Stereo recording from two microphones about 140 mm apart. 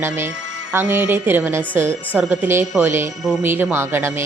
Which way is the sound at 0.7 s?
15° right (ahead or behind).